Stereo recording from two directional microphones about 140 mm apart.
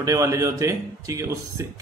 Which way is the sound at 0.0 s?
25° right (ahead or behind).